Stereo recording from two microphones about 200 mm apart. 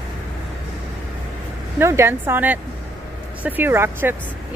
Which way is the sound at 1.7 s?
10° right (ahead or behind).